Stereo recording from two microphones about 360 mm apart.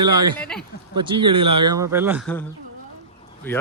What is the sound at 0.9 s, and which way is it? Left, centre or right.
Speech, centre.